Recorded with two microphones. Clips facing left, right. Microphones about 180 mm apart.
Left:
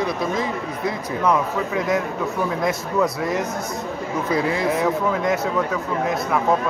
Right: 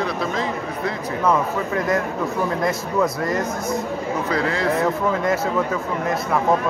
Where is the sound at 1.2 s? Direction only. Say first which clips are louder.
Even; centre (ahead or behind).